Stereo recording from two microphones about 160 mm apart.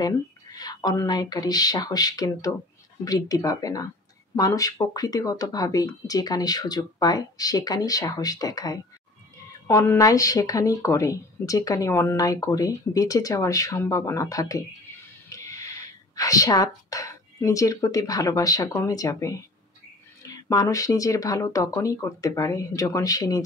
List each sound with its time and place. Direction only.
0.0 s a woman's voice: 25° left (ahead or behind)